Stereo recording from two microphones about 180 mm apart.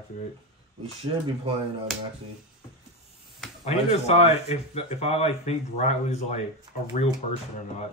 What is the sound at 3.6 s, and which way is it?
Speech, 35° left (ahead or behind).